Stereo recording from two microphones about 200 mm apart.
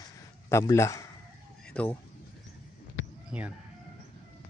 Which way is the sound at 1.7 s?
5° left (ahead or behind).